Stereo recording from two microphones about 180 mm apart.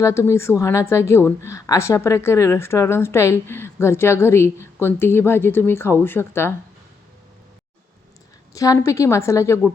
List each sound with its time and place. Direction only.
0.0 s a woman's voice: 15° left (ahead or behind)
8.5 s a woman's voice: 20° left (ahead or behind)